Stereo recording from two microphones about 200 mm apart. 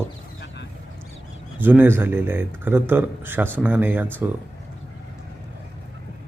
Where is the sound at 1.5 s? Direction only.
10° right (ahead or behind).